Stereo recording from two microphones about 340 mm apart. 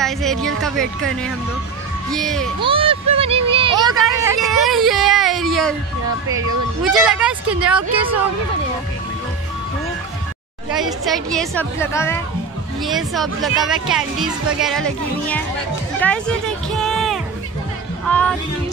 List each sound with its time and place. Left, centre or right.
0.0 s speech: centre
2.6 s speech: centre
6.2 s speech: centre
10.7 s speech: centre